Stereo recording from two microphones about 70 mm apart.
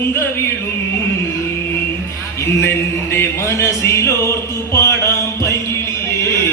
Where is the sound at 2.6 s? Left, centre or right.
Left.